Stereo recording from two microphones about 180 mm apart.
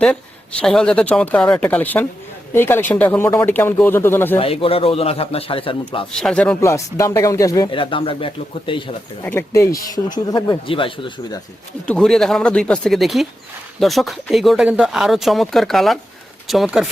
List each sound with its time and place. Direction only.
0.6 s speech: 5° left (ahead or behind)
4.4 s speech: 30° left (ahead or behind)
6.1 s speech: 5° left (ahead or behind)
6.6 s speech: 15° left (ahead or behind)
9.2 s speech: 15° left (ahead or behind)
11.9 s speech: 5° left (ahead or behind)